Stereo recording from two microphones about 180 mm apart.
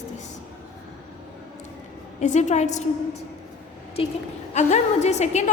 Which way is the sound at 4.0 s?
30° left (ahead or behind).